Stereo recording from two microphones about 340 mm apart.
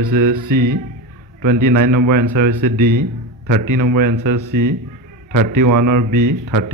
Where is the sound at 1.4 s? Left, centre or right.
Right.